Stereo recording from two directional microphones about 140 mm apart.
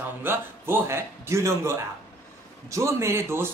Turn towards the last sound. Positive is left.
turn(degrees=-20)  # may be behind; listen again after turning